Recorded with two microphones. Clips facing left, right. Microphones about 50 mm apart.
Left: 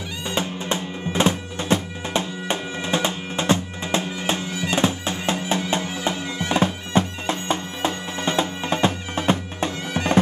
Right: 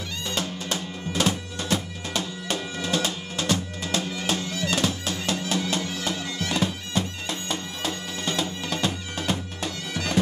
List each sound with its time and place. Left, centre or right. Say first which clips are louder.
0.3 s bagpipes: left 5 dB; left